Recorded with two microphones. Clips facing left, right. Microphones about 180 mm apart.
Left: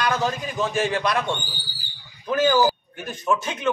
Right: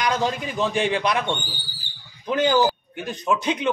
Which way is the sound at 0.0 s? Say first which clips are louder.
Right 1 dB; 15° right (ahead or behind).